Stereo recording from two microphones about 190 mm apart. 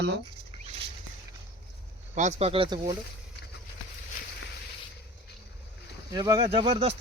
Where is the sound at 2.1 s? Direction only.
35° right (ahead or behind).